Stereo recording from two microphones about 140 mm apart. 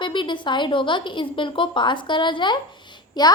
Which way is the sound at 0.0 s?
35° left (ahead or behind).